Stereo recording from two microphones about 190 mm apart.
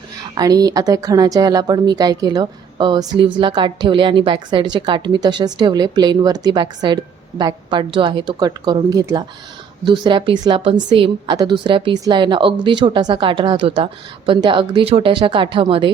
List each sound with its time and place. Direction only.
0.3 s a woman's voice: 20° right (ahead or behind)